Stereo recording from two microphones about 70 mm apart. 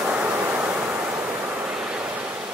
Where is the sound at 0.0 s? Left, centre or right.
Centre.